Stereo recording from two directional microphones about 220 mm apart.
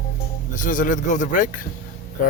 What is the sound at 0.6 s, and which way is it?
Speech, 35° left (ahead or behind).